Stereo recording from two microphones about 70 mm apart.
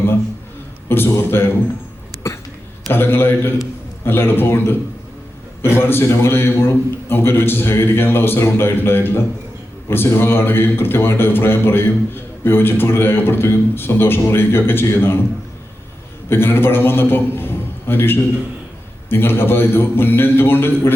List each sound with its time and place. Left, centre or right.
0.9 s a man's voice: left
2.9 s a man's voice: left
16.3 s a man's voice: left